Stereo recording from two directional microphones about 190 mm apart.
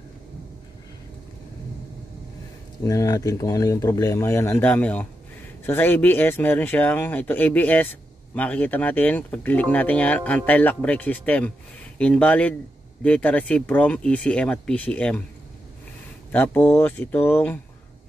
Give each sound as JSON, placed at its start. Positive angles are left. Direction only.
{"t": 2.8, "sound": "speech", "side_deg": 15}
{"t": 16.3, "sound": "speech", "side_deg": 10}